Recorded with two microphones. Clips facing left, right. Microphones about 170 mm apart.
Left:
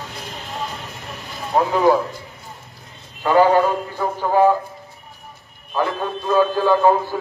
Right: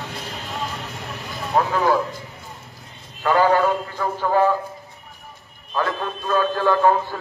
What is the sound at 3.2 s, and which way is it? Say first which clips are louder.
A man's voice: left 3 dB; 15° left (ahead or behind).